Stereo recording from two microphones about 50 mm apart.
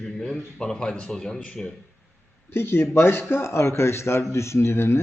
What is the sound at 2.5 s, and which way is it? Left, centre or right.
Speech, left.